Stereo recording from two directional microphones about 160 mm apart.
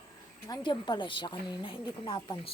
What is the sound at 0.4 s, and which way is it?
Speech, 30° left (ahead or behind).